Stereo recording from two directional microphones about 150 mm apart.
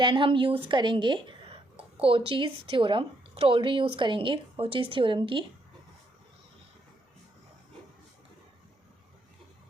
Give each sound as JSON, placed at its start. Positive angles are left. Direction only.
{"t": 0.0, "sound": "speech", "side_deg": -35}